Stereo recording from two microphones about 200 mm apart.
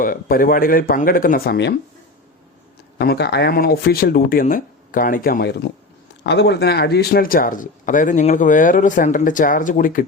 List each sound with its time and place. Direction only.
0.0 s speech: 45° left (ahead or behind)
3.0 s speech: 55° left (ahead or behind)